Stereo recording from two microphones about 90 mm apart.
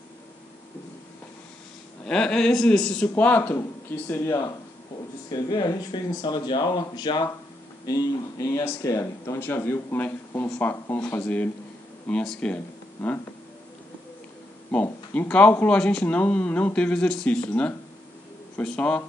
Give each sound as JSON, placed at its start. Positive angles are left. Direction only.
{"t": 2.0, "sound": "a man's voice", "side_deg": 5}
{"t": 3.2, "sound": "speech", "side_deg": 20}
{"t": 4.1, "sound": "speech", "side_deg": 30}
{"t": 5.3, "sound": "speech", "side_deg": 50}
{"t": 14.7, "sound": "speech", "side_deg": 15}